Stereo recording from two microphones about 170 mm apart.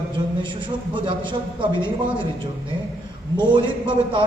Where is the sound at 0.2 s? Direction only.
25° right (ahead or behind).